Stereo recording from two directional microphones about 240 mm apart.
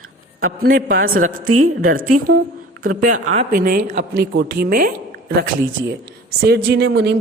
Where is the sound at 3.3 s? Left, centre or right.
Right.